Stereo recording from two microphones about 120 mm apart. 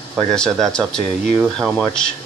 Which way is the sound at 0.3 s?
5° left (ahead or behind).